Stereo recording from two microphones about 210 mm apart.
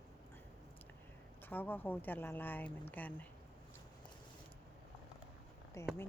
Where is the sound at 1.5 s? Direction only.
10° left (ahead or behind).